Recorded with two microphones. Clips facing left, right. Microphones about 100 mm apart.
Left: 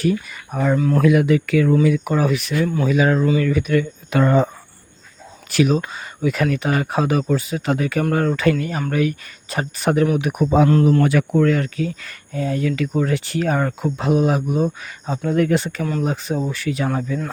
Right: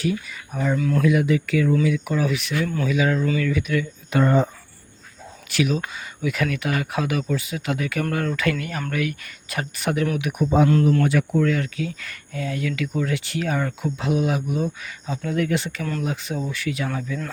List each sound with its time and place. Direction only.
0.0 s speech: 50° left (ahead or behind)
0.8 s speech: 35° left (ahead or behind)
1.0 s speech: 60° left (ahead or behind)
1.8 s speech: 45° left (ahead or behind)
4.1 s speech: 90° left
5.5 s speech: 40° left (ahead or behind)
11.0 s speech: 70° left (ahead or behind); by 17.2 s 40° left (ahead or behind)